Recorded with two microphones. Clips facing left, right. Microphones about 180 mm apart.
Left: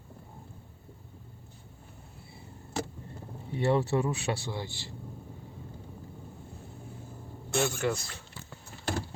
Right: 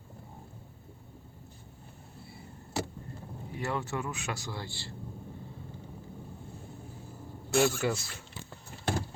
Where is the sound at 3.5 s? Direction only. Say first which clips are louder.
Left 8 dB; 30° left (ahead or behind).